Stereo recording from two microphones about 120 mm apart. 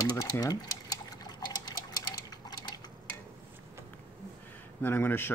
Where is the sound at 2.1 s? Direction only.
35° left (ahead or behind).